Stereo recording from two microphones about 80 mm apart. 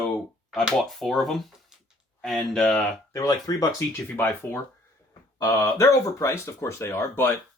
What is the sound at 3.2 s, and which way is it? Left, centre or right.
Speech, left.